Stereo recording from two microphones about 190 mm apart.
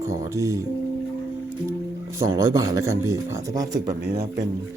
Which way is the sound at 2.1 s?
15° right (ahead or behind).